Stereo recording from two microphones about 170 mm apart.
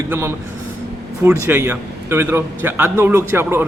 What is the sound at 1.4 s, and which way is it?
A man's voice, 15° right (ahead or behind).